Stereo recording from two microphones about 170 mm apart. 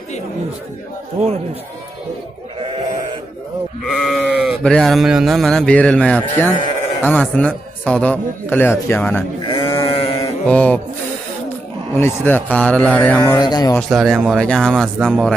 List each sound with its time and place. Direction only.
3.8 s a man's voice: centre (ahead or behind)
9.4 s sheep: 30° left (ahead or behind)
10.4 s a man's voice: 10° left (ahead or behind)
12.0 s a man's voice: 10° left (ahead or behind)
13.4 s speech: 25° left (ahead or behind)
13.7 s speech: centre (ahead or behind)